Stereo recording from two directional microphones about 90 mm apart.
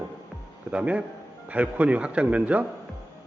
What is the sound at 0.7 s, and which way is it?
A man's voice, 15° right (ahead or behind).